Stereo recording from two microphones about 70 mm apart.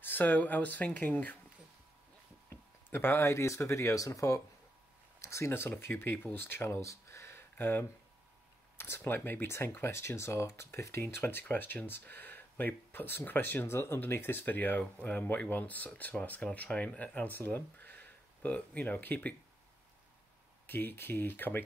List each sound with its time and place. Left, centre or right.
0.0 s speech: left
2.9 s speech: left
20.6 s speech: left